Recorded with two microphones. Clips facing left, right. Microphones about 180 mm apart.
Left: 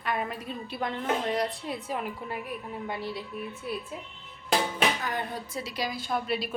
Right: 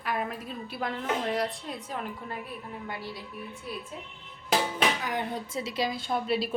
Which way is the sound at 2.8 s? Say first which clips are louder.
Left 5 dB; 25° left (ahead or behind).